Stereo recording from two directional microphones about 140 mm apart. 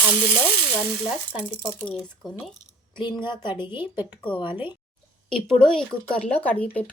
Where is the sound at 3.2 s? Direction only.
35° left (ahead or behind).